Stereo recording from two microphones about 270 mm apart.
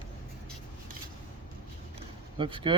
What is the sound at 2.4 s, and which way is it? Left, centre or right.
Speech, centre.